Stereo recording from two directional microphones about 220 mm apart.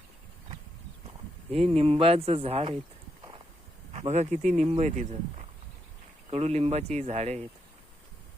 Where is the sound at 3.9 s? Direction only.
30° right (ahead or behind).